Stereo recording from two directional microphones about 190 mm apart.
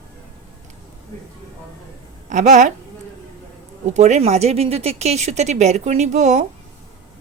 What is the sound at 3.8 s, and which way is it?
Speech, 35° right (ahead or behind).